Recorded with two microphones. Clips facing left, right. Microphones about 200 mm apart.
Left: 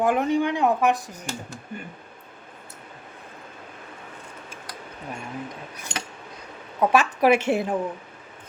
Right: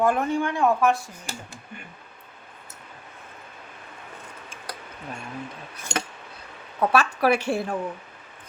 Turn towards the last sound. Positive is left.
turn(degrees=20)  # may be behind; listen again after turning